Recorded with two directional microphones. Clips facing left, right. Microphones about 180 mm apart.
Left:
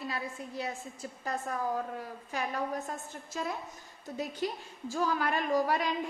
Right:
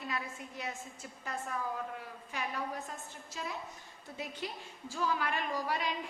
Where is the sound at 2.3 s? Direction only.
40° left (ahead or behind).